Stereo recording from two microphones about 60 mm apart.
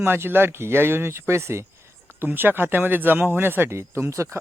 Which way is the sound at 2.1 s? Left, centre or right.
Right.